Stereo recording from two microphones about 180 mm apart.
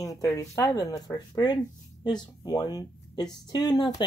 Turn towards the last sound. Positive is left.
turn(degrees=25)  # may be behind; listen again after turning